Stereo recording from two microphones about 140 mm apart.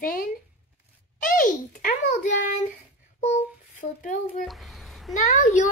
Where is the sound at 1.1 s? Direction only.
75° left (ahead or behind).